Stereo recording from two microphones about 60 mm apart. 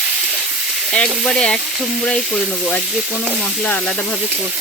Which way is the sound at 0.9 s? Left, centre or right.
Centre.